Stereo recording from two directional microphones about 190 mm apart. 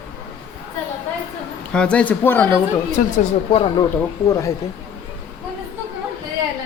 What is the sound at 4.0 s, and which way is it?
Speech, 15° left (ahead or behind).